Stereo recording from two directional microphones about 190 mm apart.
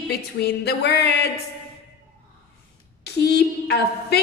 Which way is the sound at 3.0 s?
60° left (ahead or behind).